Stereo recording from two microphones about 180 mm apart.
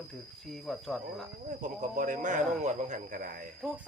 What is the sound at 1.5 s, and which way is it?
Speech, 45° right (ahead or behind).